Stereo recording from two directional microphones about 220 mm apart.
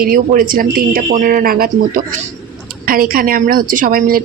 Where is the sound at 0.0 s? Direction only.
40° right (ahead or behind).